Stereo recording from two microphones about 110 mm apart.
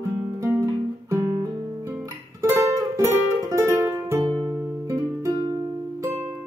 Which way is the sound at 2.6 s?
30° right (ahead or behind).